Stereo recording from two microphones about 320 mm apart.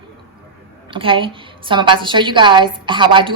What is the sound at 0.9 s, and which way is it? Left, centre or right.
A woman's voice, centre.